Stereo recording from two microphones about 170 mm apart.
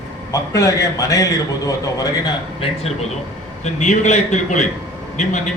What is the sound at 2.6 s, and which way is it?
A man's voice, 35° left (ahead or behind).